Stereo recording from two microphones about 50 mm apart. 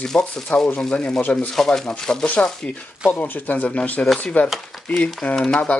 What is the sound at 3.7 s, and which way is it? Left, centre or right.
Speech, left.